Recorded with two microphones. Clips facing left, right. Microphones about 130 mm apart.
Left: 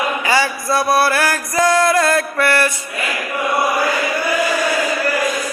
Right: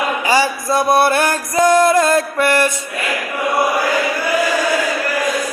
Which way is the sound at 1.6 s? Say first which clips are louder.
Right 3 dB; 20° right (ahead or behind).